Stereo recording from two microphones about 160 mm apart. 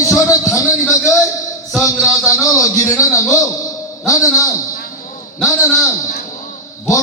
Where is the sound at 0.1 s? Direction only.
20° left (ahead or behind).